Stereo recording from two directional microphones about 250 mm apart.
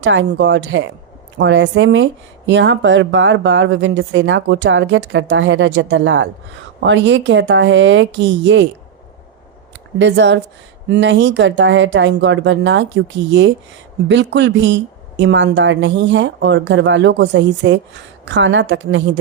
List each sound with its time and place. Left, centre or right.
0.0 s speech: right
10.0 s speech: right
14.1 s speech: right